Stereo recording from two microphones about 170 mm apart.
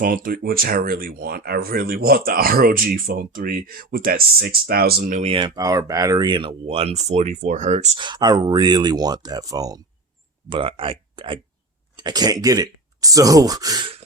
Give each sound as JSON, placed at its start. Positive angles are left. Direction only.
{"t": 0.0, "sound": "speech", "side_deg": -55}
{"t": 5.2, "sound": "speech", "side_deg": -30}
{"t": 5.5, "sound": "speech", "side_deg": -20}
{"t": 7.9, "sound": "speech", "side_deg": -25}